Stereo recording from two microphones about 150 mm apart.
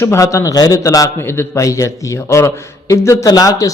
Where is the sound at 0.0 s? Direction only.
20° left (ahead or behind).